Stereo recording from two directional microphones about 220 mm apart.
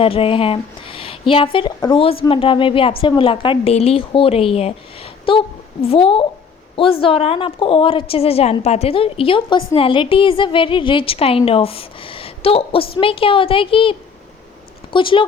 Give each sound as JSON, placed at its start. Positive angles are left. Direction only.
{"t": 0.0, "sound": "a woman's voice", "side_deg": 25}
{"t": 14.9, "sound": "a woman's voice", "side_deg": 25}